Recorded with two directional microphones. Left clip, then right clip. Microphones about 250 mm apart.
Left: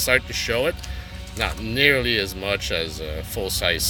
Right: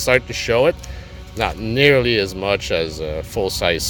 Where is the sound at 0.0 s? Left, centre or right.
Centre.